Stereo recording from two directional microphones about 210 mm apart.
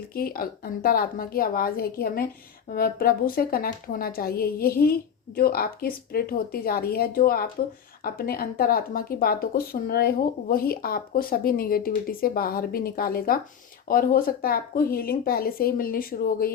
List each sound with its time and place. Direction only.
0.1 s speech: 45° left (ahead or behind)